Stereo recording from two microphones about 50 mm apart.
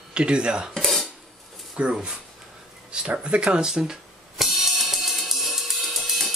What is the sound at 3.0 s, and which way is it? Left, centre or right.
Speech, right.